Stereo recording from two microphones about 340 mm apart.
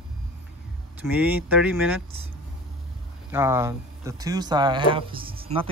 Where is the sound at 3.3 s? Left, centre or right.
Centre.